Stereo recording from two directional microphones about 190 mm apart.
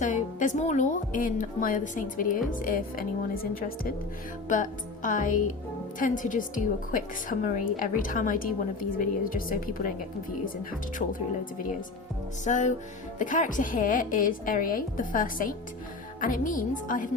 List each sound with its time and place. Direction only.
0.0 s a woman's voice: 40° left (ahead or behind)
12.5 s a woman's voice: 40° left (ahead or behind)